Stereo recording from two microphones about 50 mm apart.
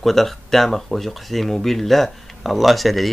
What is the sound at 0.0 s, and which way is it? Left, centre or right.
Speech, centre.